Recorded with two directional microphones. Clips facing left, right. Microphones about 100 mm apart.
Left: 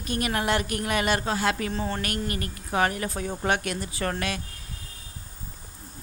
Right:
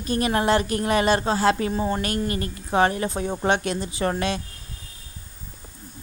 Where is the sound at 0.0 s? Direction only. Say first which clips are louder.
Right 5 dB; 30° right (ahead or behind).